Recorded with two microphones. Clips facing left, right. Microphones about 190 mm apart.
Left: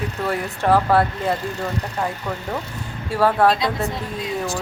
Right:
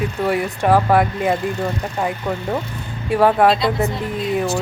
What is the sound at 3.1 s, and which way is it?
Speech, 15° right (ahead or behind).